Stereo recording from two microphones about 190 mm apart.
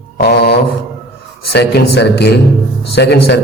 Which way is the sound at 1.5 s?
60° left (ahead or behind).